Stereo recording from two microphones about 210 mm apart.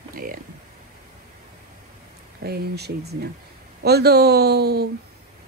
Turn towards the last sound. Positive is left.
turn(degrees=-50)  # may be behind; listen again after turning